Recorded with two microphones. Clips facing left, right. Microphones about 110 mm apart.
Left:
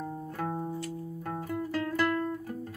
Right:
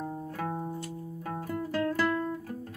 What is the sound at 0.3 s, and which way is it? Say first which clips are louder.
Music: left 3 dB; centre (ahead or behind).